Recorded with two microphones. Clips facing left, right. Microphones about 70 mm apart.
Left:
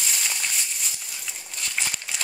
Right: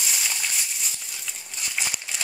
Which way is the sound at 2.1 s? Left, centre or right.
Centre.